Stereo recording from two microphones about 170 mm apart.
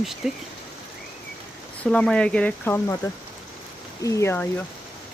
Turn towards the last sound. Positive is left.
turn(degrees=15)  # may be behind; listen again after turning